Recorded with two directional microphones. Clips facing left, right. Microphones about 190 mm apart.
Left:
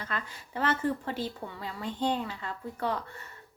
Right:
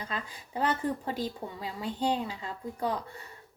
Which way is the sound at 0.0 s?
15° right (ahead or behind).